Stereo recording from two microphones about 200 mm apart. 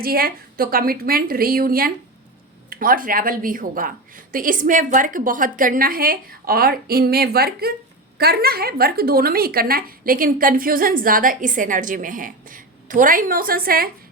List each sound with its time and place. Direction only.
0.0 s a woman's voice: 45° right (ahead or behind)